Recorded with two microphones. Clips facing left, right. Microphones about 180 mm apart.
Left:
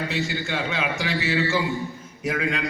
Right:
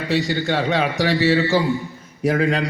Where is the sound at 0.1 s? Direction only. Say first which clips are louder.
Right 7 dB; 35° right (ahead or behind).